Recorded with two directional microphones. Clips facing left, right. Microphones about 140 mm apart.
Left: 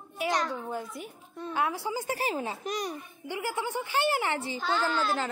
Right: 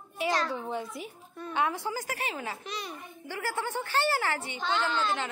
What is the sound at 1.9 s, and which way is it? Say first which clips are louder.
Speech: left 4 dB; 30° left (ahead or behind).